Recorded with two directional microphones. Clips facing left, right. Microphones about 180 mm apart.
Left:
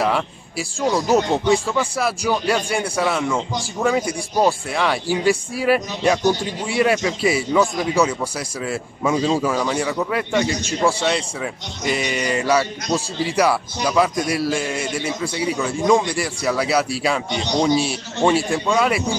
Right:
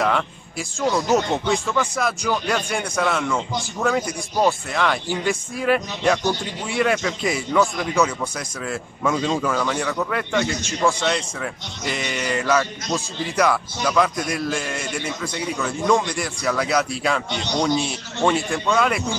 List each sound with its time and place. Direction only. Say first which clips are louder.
0.0 s a sound: left 1 dB; 5° left (ahead or behind)
1.1 s speech: left 3 dB; 15° left (ahead or behind)
17.5 s speech: left 3 dB; 15° left (ahead or behind)